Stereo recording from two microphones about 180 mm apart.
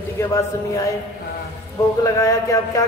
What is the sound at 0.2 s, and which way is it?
Speech, 15° left (ahead or behind).